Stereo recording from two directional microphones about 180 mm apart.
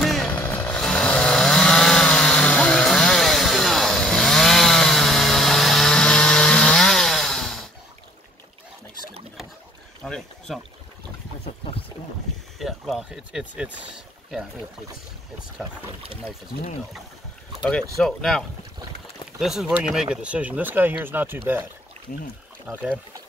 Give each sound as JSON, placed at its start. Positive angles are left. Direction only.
{"t": 0.0, "sound": "chainsaw", "side_deg": 0}
{"t": 10.0, "sound": "boat", "side_deg": 5}
{"t": 12.5, "sound": "a sound", "side_deg": 0}
{"t": 13.7, "sound": "boat", "side_deg": -5}
{"t": 17.6, "sound": "speech", "side_deg": 5}
{"t": 19.4, "sound": "speech", "side_deg": 0}
{"t": 22.7, "sound": "speech", "side_deg": -10}